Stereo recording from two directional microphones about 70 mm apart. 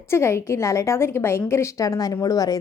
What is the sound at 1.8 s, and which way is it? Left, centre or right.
Speech, left.